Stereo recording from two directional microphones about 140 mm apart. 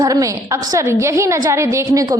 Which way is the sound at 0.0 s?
25° right (ahead or behind).